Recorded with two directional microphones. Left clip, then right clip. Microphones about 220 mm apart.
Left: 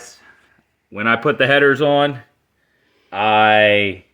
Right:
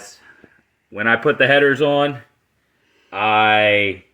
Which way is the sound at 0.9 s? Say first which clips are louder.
Even; 45° left (ahead or behind).